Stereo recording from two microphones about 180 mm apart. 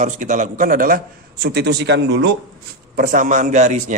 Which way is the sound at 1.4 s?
65° right (ahead or behind).